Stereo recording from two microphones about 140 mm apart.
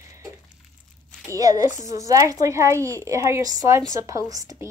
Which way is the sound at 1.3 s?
25° right (ahead or behind).